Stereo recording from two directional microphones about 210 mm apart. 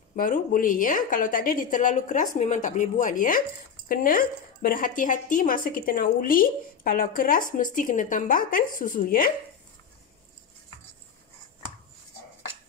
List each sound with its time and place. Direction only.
0.1 s speech: 40° left (ahead or behind)